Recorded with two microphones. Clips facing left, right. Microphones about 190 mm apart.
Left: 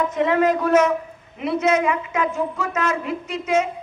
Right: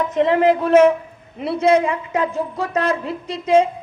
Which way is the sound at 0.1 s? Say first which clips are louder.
Right 3 dB; 30° right (ahead or behind).